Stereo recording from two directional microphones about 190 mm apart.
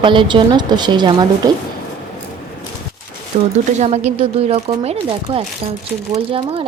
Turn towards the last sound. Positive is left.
turn(degrees=-30)  # may be behind; listen again after turning